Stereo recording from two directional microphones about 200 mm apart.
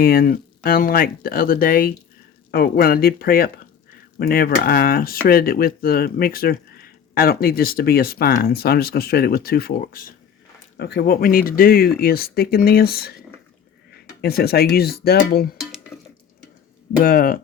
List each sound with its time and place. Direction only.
0.0 s speech: 45° left (ahead or behind)
14.2 s speech: 50° left (ahead or behind)
17.0 s speech: 45° left (ahead or behind)